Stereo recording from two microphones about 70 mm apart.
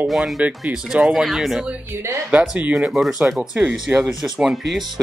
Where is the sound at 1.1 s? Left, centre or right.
Centre.